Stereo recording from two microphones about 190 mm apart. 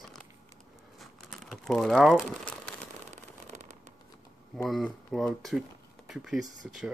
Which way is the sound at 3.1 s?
40° right (ahead or behind).